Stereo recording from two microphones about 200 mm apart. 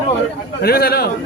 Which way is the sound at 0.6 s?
50° left (ahead or behind).